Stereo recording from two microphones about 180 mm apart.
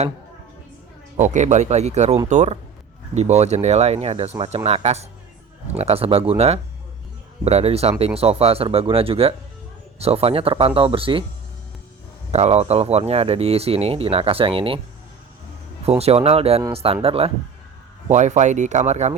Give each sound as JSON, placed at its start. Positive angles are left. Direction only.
{"t": 1.1, "sound": "speech", "side_deg": -40}
{"t": 12.3, "sound": "speech", "side_deg": -35}
{"t": 15.9, "sound": "speech", "side_deg": -35}